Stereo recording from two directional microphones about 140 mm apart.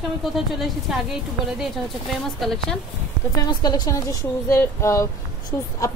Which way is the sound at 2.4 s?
5° left (ahead or behind).